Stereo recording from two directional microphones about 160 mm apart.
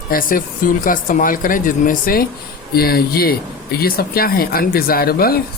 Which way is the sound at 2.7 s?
70° left (ahead or behind).